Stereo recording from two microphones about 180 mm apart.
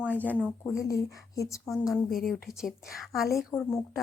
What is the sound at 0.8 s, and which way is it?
Speech, 20° left (ahead or behind).